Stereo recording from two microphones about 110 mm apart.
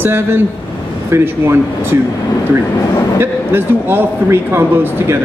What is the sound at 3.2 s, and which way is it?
Speech, 20° right (ahead or behind).